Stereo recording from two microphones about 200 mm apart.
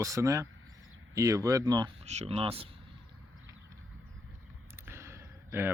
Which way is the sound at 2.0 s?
35° right (ahead or behind).